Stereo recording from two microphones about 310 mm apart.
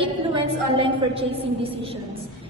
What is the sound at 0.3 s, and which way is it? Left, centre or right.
A woman's voice, centre.